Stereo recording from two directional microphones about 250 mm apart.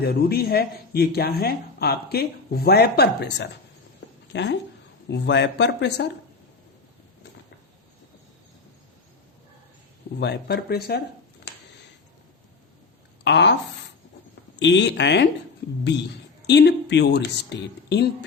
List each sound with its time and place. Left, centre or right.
0.0 s speech: left
10.2 s speech: left
13.2 s speech: left
14.6 s speech: left